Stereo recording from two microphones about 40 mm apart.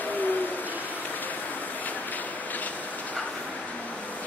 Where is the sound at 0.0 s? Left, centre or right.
Left.